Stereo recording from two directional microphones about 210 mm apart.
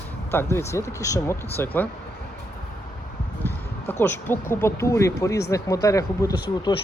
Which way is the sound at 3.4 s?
10° left (ahead or behind).